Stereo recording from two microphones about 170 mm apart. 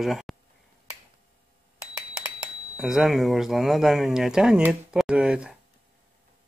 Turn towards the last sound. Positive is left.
turn(degrees=-5)  # may be behind; listen again after turning